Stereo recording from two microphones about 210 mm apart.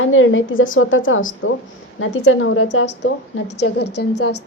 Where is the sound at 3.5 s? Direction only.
55° left (ahead or behind).